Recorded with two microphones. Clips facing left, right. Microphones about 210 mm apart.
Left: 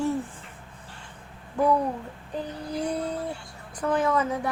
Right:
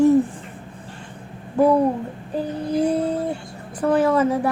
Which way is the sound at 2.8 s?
30° right (ahead or behind).